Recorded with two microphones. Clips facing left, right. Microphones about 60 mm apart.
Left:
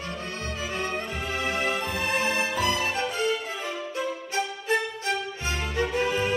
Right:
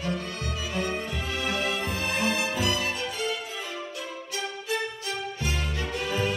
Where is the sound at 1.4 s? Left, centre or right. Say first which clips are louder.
Left 2 dB; left.